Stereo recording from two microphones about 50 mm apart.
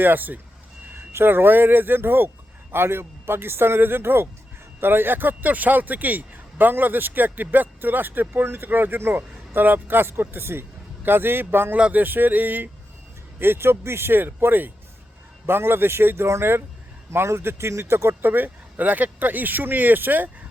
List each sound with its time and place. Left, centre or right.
0.0 s a man's voice: right
11.8 s speech: right
13.4 s a man's voice: right
17.1 s speech: right